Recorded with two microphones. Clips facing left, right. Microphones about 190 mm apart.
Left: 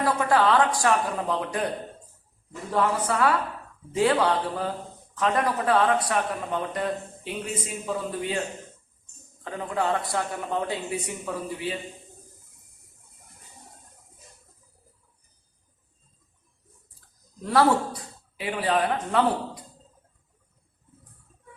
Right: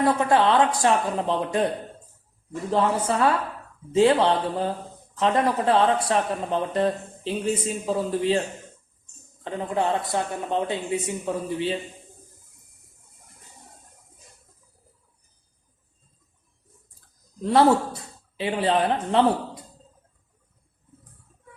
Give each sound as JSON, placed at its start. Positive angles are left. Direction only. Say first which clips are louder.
{"t": 0.0, "sound": "speech", "louder": "right 2 dB", "side_deg": -25}
{"t": 2.6, "sound": "speech", "louder": "right 2 dB", "side_deg": -25}
{"t": 9.4, "sound": "speech", "louder": "right 3 dB", "side_deg": -25}
{"t": 17.4, "sound": "speech", "louder": "right 3 dB", "side_deg": -25}